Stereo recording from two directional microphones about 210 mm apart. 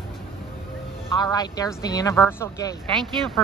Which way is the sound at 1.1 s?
20° left (ahead or behind).